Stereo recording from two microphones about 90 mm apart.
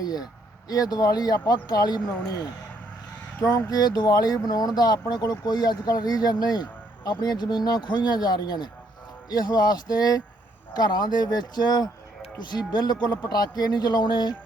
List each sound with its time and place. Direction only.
0.0 s speech: 45° left (ahead or behind)
3.7 s speech: 45° left (ahead or behind)